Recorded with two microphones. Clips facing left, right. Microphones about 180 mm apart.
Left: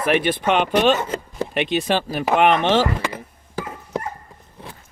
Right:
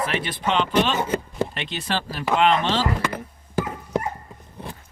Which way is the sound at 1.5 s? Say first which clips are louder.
Left 8 dB; 15° left (ahead or behind).